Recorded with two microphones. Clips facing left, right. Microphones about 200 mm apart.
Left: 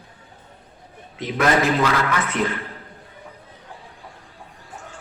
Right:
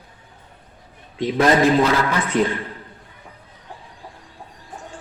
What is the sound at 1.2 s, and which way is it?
A man's voice, 30° right (ahead or behind).